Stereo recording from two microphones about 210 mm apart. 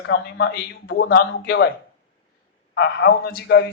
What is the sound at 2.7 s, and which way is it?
Speech, 55° left (ahead or behind).